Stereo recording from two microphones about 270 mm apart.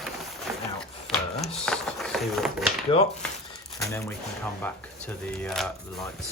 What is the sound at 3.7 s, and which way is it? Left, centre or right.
Speech, centre.